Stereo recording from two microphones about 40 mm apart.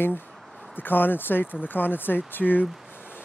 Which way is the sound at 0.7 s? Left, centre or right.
Left.